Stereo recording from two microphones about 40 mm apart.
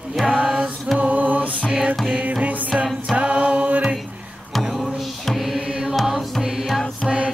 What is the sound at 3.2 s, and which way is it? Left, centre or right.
Music, right.